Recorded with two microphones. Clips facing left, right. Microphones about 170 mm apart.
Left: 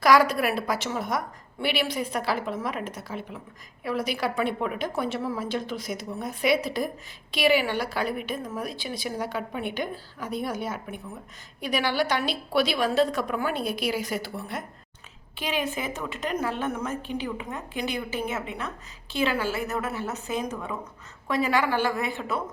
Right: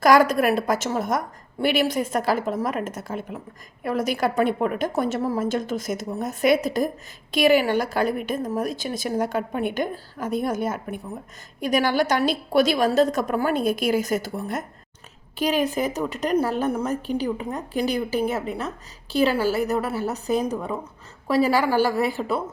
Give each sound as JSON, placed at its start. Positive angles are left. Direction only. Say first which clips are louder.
{"t": 0.0, "sound": "a woman's voice", "louder": "right 4 dB", "side_deg": -45}